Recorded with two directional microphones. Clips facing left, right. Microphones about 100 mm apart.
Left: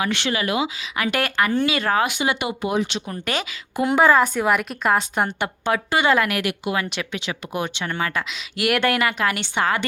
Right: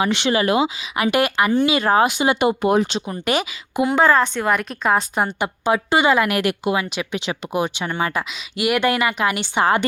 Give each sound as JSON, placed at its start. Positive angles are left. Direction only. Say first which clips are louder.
{"t": 0.0, "sound": "speech", "louder": "right 5 dB", "side_deg": -25}
{"t": 0.8, "sound": "speech", "louder": "right 5 dB", "side_deg": -15}
{"t": 3.1, "sound": "speech", "louder": "right 5 dB", "side_deg": -15}
{"t": 3.8, "sound": "a woman's voice", "louder": "even", "side_deg": 5}
{"t": 5.7, "sound": "speech", "louder": "right 4 dB", "side_deg": -20}
{"t": 6.4, "sound": "speech", "louder": "right 4 dB", "side_deg": -35}
{"t": 6.9, "sound": "a woman's voice", "louder": "right 3 dB", "side_deg": -15}
{"t": 9.6, "sound": "speech", "louder": "right 5 dB", "side_deg": -25}